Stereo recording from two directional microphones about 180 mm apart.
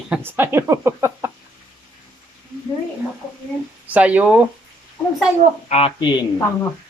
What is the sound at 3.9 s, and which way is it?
Speech, 10° right (ahead or behind).